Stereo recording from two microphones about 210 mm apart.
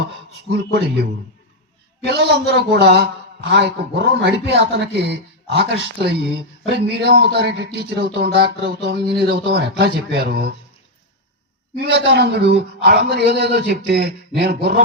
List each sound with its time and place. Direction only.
2.0 s a man's voice: 50° right (ahead or behind)
11.8 s a man's voice: 50° right (ahead or behind)